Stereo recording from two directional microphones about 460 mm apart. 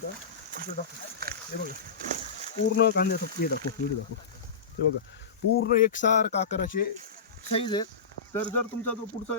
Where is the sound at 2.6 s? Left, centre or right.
Left.